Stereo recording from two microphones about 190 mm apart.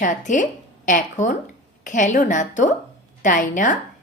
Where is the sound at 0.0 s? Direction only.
40° left (ahead or behind).